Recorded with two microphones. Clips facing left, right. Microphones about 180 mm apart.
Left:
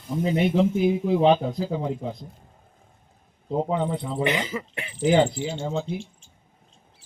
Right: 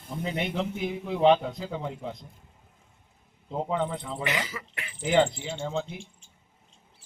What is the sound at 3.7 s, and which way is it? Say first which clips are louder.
Speech: left 4 dB; 10° left (ahead or behind).